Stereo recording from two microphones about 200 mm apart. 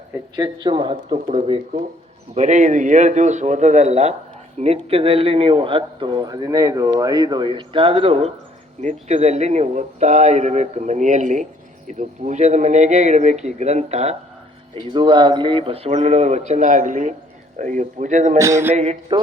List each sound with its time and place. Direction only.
0.3 s speech: 20° right (ahead or behind)
14.9 s speech: 20° right (ahead or behind)
18.3 s a sound: 15° right (ahead or behind)
18.7 s speech: 30° right (ahead or behind)